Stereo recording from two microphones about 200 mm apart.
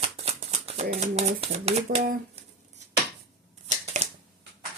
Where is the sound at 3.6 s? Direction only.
30° right (ahead or behind).